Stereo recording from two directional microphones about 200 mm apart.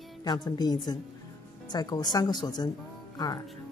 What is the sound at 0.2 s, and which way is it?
Speech, 20° left (ahead or behind).